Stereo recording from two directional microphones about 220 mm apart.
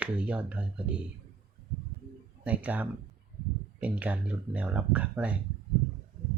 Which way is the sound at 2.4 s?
5° right (ahead or behind).